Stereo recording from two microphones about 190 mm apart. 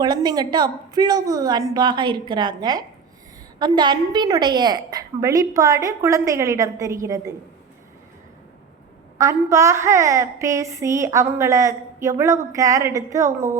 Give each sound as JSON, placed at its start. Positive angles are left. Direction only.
{"t": 0.0, "sound": "a woman's voice", "side_deg": -20}
{"t": 9.1, "sound": "a woman's voice", "side_deg": -15}